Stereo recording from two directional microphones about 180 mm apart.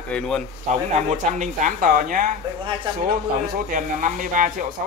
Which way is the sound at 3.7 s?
45° right (ahead or behind).